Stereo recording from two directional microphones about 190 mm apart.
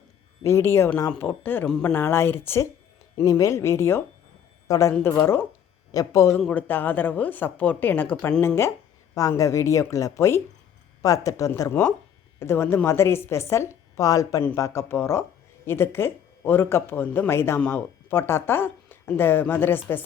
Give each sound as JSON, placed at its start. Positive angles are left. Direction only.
{"t": 0.4, "sound": "speech", "side_deg": 15}